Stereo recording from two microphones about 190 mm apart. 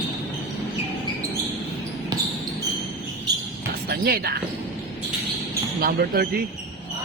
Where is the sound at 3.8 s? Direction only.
55° right (ahead or behind).